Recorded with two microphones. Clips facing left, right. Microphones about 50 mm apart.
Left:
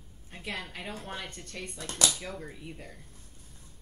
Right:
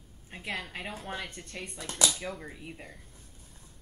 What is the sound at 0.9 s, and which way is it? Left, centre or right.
Speech, centre.